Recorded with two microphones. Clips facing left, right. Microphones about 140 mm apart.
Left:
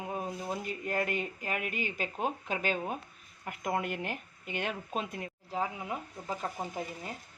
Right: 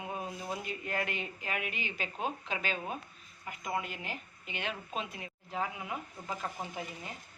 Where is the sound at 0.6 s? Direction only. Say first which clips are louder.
Left 5 dB; 45° left (ahead or behind).